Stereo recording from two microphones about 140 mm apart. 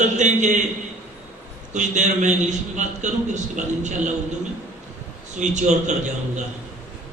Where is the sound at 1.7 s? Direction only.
60° right (ahead or behind).